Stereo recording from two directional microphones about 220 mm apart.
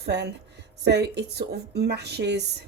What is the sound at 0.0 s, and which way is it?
Speech, 50° right (ahead or behind).